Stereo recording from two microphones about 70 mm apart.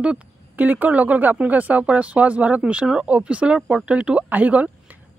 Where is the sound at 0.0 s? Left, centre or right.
Centre.